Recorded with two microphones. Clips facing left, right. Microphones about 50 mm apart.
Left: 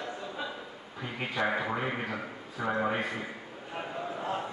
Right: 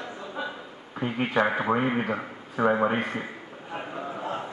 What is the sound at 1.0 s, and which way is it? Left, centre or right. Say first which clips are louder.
A man's voice: right 7 dB; right.